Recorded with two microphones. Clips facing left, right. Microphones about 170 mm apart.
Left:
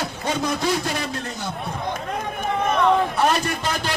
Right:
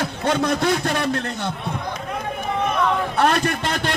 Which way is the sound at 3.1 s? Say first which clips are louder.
Right 2 dB; 60° right (ahead or behind).